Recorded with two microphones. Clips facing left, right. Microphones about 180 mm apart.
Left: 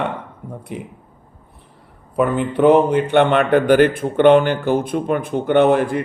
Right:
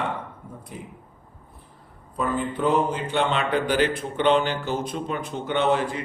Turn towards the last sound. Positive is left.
turn(degrees=55)  # may be behind; listen again after turning